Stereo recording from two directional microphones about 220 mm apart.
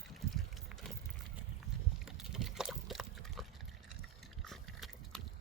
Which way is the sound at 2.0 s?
Centre (ahead or behind).